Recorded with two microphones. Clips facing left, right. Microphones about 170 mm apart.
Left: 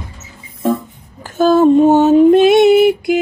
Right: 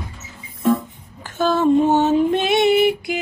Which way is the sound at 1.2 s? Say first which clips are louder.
Left 7 dB; 40° left (ahead or behind).